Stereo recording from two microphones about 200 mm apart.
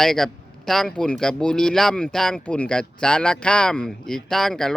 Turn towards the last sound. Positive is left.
turn(degrees=5)  # may be behind; listen again after turning